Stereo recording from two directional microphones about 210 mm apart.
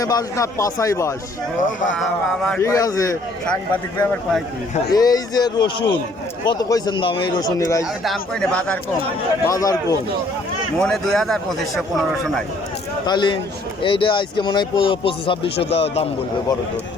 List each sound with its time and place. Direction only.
0.0 s speech: 15° left (ahead or behind)
2.0 s a man's voice: centre (ahead or behind)
2.6 s speech: 15° left (ahead or behind)
8.0 s a man's voice: centre (ahead or behind)
9.4 s speech: 15° left (ahead or behind)
10.8 s a man's voice: 5° left (ahead or behind)
13.1 s speech: 20° left (ahead or behind)